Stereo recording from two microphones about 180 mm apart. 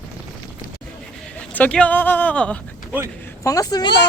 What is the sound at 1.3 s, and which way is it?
Speech, 10° left (ahead or behind).